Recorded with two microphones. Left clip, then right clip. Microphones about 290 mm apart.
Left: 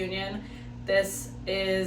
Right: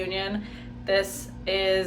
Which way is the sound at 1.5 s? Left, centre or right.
Centre.